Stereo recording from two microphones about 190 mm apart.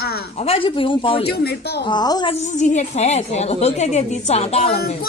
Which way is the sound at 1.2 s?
55° left (ahead or behind).